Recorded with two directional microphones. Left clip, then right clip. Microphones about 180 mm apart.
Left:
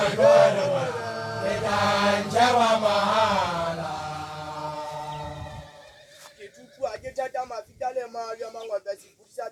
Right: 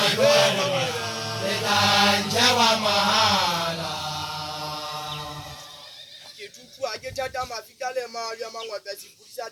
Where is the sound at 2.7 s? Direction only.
35° right (ahead or behind).